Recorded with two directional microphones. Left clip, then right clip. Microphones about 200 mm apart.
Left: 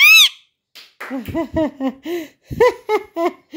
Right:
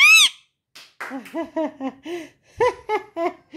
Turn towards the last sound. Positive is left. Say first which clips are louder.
# left 5 dB
turn(degrees=50)  # may be behind; listen again after turning